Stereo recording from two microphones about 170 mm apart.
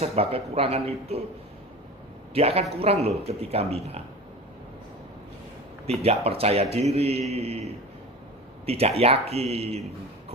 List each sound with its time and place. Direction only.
0.0 s speech: 35° right (ahead or behind)
2.3 s speech: 35° right (ahead or behind)
5.8 s speech: 35° right (ahead or behind)